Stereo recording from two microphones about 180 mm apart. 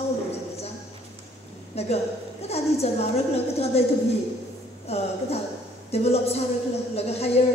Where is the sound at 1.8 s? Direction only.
35° left (ahead or behind).